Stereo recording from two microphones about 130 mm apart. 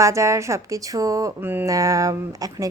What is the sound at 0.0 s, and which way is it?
Speech, 25° right (ahead or behind).